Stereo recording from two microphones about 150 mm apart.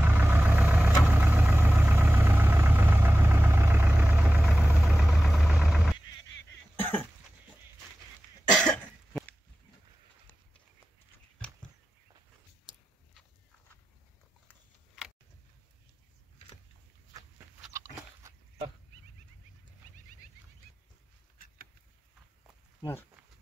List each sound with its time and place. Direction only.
0.0 s vehicle: 15° right (ahead or behind)
6.8 s cough: 15° left (ahead or behind)
8.5 s cough: 5° left (ahead or behind)
17.7 s biting: 20° right (ahead or behind)